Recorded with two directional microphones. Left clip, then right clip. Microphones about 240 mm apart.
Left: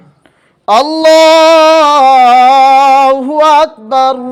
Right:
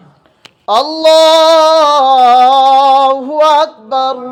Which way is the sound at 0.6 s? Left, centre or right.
Left.